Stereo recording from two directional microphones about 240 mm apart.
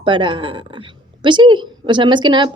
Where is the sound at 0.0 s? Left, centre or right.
Centre.